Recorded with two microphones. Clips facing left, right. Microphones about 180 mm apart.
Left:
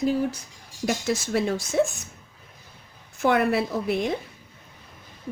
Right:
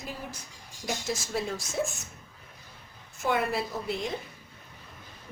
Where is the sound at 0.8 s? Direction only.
70° left (ahead or behind).